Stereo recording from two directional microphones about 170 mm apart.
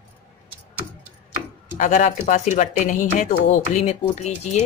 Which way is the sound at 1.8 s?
45° left (ahead or behind).